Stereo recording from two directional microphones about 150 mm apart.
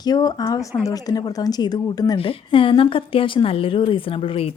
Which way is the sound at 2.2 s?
35° left (ahead or behind).